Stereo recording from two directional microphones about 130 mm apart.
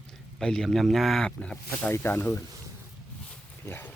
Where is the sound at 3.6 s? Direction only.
15° left (ahead or behind).